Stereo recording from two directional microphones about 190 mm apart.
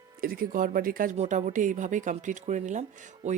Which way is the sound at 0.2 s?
50° right (ahead or behind).